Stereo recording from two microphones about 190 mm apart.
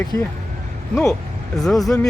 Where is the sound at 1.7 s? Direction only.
Centre (ahead or behind).